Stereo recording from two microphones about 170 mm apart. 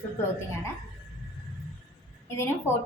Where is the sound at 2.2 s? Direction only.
15° left (ahead or behind).